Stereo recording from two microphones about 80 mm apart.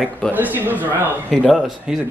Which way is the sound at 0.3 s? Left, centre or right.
Right.